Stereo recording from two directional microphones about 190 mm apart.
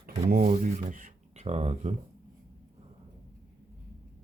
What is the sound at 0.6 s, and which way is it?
Speech, 45° right (ahead or behind).